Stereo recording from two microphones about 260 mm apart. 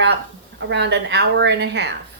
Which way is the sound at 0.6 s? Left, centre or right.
Right.